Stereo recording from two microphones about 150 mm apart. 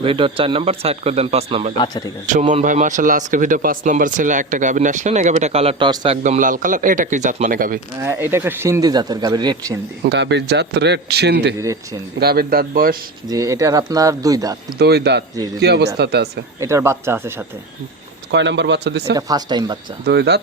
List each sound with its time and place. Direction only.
0.0 s speech: 35° right (ahead or behind)
2.2 s speech: 55° right (ahead or behind); by 5.9 s 40° right (ahead or behind)
5.9 s speech: 30° right (ahead or behind)
6.2 s speech: 60° right (ahead or behind)
8.0 s speech: 15° right (ahead or behind)
10.0 s speech: 90° right; by 13.0 s 70° right (ahead or behind)
13.2 s speech: 25° right (ahead or behind)
14.8 s speech: 90° right
16.6 s speech: 20° right (ahead or behind)
19.1 s speech: 25° right (ahead or behind)
20.1 s speech: 90° right